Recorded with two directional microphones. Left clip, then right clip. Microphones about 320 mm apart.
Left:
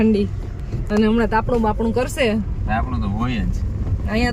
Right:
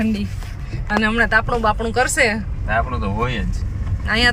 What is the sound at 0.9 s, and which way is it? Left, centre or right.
Speech, right.